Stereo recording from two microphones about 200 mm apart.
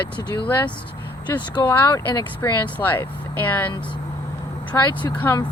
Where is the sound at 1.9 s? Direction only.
20° left (ahead or behind).